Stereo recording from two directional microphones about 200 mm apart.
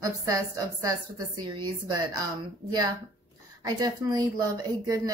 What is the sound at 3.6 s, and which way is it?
Speech, 20° right (ahead or behind).